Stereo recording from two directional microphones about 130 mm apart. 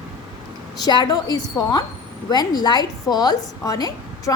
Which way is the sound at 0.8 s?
35° left (ahead or behind).